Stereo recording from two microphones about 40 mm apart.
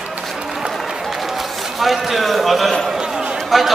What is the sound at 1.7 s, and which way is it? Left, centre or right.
A man's voice, centre.